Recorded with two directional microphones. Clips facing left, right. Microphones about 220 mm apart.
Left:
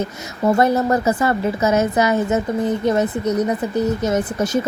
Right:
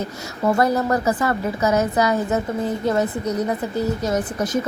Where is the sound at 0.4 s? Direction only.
25° left (ahead or behind).